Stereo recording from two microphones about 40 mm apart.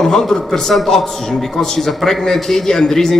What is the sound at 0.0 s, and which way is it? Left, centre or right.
A man's voice, centre.